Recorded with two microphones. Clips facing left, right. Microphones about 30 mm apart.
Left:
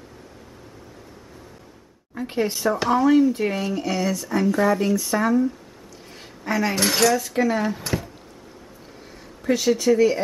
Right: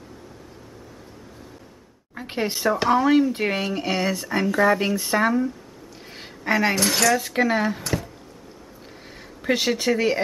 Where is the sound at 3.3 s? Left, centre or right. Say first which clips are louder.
Even; right.